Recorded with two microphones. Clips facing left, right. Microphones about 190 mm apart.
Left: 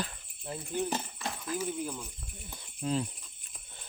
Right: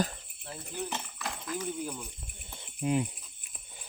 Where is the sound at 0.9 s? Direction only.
30° left (ahead or behind).